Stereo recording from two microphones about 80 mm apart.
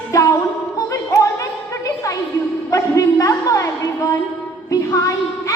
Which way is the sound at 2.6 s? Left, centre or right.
Left.